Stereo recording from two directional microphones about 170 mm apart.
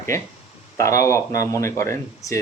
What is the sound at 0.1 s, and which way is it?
Speech, 15° left (ahead or behind).